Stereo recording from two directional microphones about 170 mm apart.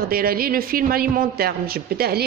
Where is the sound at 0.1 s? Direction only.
60° right (ahead or behind).